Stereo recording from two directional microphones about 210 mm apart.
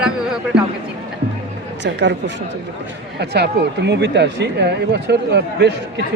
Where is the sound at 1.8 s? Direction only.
55° right (ahead or behind).